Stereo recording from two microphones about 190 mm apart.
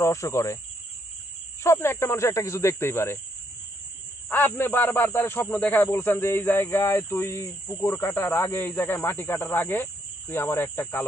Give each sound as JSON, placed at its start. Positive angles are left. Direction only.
{"t": 0.0, "sound": "speech", "side_deg": 15}
{"t": 1.6, "sound": "speech", "side_deg": 15}
{"t": 4.3, "sound": "speech", "side_deg": 10}